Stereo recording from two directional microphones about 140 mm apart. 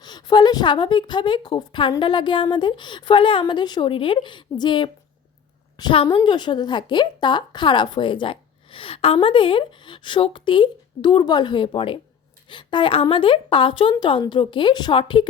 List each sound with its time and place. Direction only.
0.0 s a woman's voice: 30° left (ahead or behind)